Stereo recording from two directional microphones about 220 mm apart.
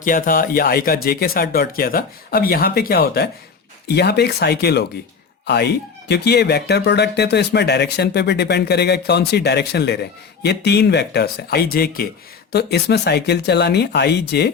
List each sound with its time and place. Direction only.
0.0 s speech: 40° left (ahead or behind)